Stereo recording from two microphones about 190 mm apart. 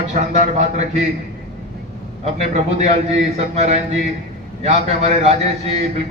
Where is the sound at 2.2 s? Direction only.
35° right (ahead or behind).